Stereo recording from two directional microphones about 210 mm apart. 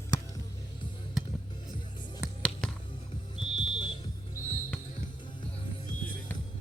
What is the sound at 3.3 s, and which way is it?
Smoke detector, 25° left (ahead or behind).